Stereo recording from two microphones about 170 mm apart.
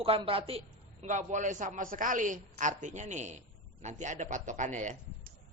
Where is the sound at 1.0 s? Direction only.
45° right (ahead or behind).